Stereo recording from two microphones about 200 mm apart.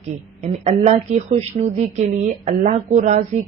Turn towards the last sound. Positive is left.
turn(degrees=-40)  # may be behind; listen again after turning